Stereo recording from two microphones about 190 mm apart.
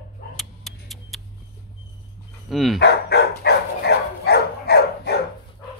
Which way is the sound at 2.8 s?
60° left (ahead or behind).